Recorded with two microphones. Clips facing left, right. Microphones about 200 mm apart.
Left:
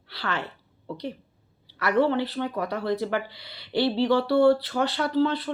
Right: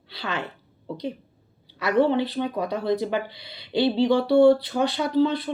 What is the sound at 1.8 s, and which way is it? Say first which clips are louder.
Speech: right 2 dB; 15° right (ahead or behind).